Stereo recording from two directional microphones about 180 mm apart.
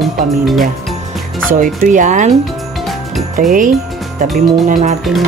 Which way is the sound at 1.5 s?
50° right (ahead or behind).